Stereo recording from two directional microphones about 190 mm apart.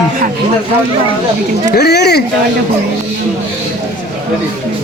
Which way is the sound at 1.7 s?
60° left (ahead or behind).